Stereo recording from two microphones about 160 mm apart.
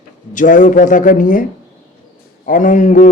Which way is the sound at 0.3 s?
55° left (ahead or behind).